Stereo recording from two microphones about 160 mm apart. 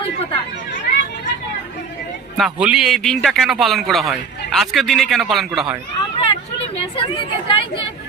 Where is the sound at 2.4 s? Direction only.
5° right (ahead or behind).